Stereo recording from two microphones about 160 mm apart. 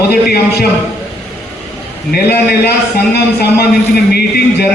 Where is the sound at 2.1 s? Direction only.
75° left (ahead or behind).